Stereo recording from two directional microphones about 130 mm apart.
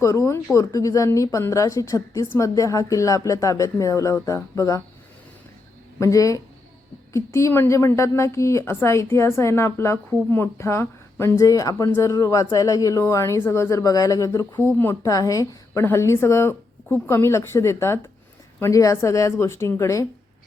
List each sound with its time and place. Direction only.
0.0 s a woman's voice: 25° left (ahead or behind)
6.0 s a woman's voice: 25° left (ahead or behind)